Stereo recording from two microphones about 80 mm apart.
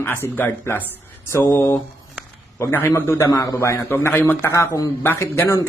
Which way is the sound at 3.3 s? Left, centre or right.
Left.